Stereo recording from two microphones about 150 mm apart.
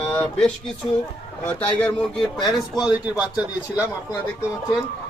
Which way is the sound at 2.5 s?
5° right (ahead or behind).